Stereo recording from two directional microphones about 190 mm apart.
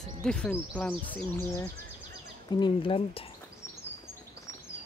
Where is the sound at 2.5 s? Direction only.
25° left (ahead or behind).